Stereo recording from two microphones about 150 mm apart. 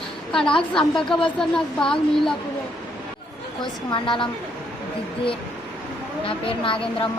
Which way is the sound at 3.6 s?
35° left (ahead or behind).